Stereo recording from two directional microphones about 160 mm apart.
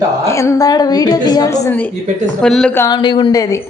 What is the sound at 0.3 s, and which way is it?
A woman's voice, 15° left (ahead or behind).